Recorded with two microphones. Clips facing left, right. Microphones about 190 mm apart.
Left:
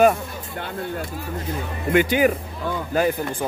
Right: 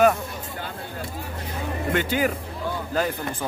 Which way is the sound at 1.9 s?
15° left (ahead or behind).